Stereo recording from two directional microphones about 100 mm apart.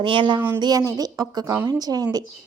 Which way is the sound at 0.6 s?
40° right (ahead or behind).